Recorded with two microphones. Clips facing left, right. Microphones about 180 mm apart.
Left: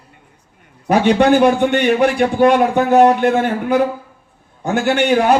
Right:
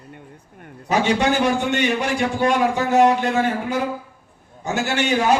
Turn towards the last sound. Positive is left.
turn(degrees=55)  # may be behind; listen again after turning